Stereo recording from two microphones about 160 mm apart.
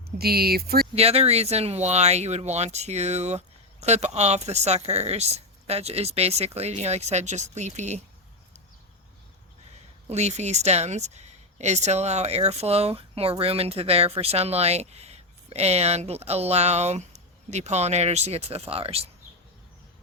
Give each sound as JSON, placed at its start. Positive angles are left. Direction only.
{"t": 0.2, "sound": "speech", "side_deg": -75}
{"t": 0.9, "sound": "speech", "side_deg": -40}
{"t": 10.1, "sound": "speech", "side_deg": -45}